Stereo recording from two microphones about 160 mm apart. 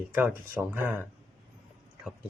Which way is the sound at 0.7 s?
15° right (ahead or behind).